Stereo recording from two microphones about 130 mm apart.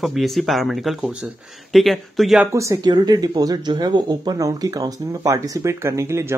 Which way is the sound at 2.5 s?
25° right (ahead or behind).